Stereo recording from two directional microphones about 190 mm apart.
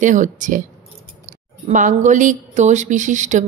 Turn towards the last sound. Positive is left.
turn(degrees=-40)  # may be behind; listen again after turning